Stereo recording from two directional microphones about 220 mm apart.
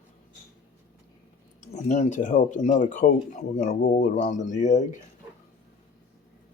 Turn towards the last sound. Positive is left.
turn(degrees=35)  # may be behind; listen again after turning